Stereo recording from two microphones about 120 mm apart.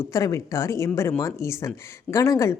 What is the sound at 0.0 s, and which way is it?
A woman's voice, 25° left (ahead or behind).